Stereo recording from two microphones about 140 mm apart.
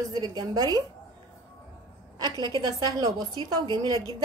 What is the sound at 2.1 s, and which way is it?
A woman's voice, 30° right (ahead or behind).